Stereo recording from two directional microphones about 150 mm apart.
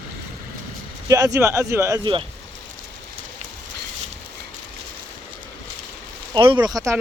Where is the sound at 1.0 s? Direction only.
20° right (ahead or behind).